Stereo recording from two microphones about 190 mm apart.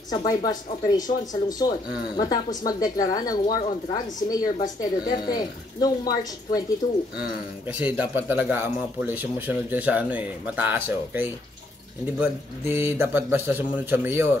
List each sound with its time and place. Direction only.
0.1 s speech: 20° left (ahead or behind)
7.2 s a man's voice: 5° right (ahead or behind)